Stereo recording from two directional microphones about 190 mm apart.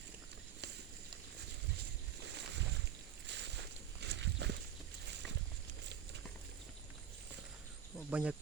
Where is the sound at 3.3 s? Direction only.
65° right (ahead or behind).